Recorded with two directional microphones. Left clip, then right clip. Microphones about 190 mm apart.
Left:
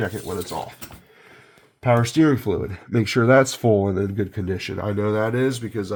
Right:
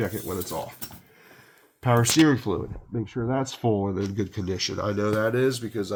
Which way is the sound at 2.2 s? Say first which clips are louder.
Left 2 dB; 20° left (ahead or behind).